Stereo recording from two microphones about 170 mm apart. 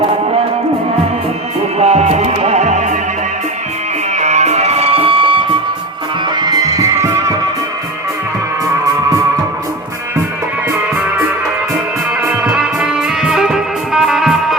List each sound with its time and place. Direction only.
1.8 s music: 40° right (ahead or behind)
4.1 s music: 45° right (ahead or behind); by 7.3 s 20° right (ahead or behind)
10.7 s music: 10° right (ahead or behind)
12.2 s music: 5° right (ahead or behind)